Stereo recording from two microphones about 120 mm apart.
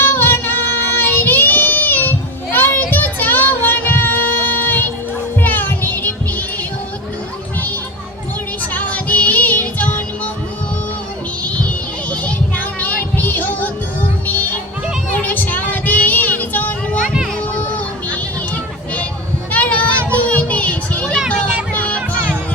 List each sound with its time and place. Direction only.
0.0 s child singing: 20° left (ahead or behind)
5.4 s music: 15° left (ahead or behind)
8.7 s music: 10° left (ahead or behind)
12.2 s music: 10° left (ahead or behind)
14.3 s children playing: 15° left (ahead or behind)
15.2 s child singing: 15° left (ahead or behind)
17.7 s a sound: 15° left (ahead or behind)
20.1 s children playing: 10° left (ahead or behind)
21.7 s music: 10° left (ahead or behind)